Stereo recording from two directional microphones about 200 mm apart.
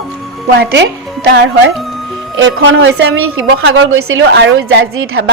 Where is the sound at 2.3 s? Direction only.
75° right (ahead or behind).